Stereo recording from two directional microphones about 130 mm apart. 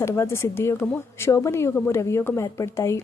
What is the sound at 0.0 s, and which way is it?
A woman's voice, 20° left (ahead or behind).